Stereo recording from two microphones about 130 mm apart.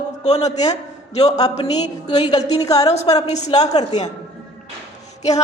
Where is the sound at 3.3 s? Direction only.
60° left (ahead or behind).